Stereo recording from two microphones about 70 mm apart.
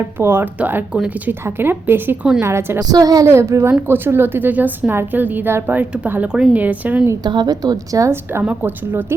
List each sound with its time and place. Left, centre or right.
0.0 s a woman's voice: right
2.7 s a woman's voice: right
3.2 s speech: right
3.7 s speech: right
6.2 s a woman's voice: centre
6.6 s speech: right
7.3 s a woman's voice: right
8.1 s a woman's voice: right